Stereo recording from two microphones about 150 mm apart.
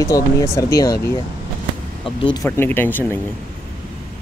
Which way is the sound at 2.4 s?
15° left (ahead or behind).